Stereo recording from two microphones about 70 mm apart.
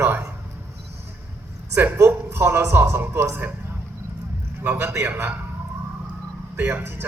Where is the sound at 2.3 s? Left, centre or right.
Right.